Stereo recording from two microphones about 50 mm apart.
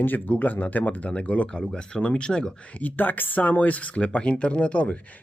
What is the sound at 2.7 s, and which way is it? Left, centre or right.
Speech, left.